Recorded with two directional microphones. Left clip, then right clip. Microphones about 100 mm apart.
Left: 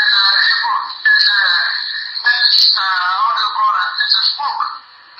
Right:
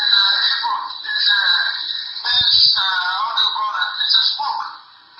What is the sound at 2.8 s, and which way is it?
Music, 20° right (ahead or behind).